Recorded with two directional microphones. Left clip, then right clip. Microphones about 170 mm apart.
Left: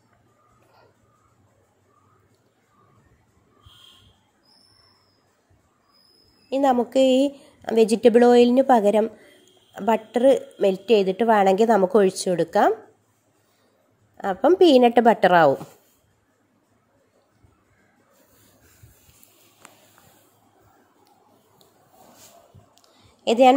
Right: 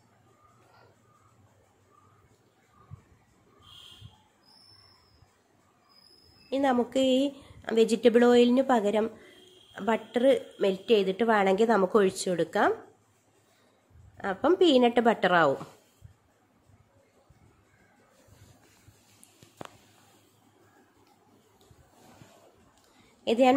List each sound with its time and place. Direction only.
6.5 s a woman's voice: 25° left (ahead or behind)
14.1 s a woman's voice: 30° left (ahead or behind)
23.2 s a woman's voice: 15° left (ahead or behind)